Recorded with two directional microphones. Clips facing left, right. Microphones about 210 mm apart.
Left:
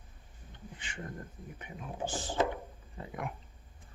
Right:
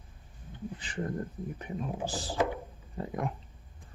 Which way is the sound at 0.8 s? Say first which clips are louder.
Right 1 dB; 35° right (ahead or behind).